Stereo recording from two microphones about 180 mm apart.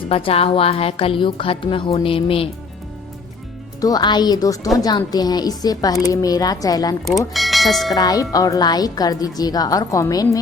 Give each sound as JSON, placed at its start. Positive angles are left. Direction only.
{"t": 0.1, "sound": "a woman's voice", "side_deg": 30}
{"t": 3.8, "sound": "a woman's voice", "side_deg": 20}
{"t": 7.0, "sound": "speech", "side_deg": 0}
{"t": 7.9, "sound": "a woman's voice", "side_deg": 20}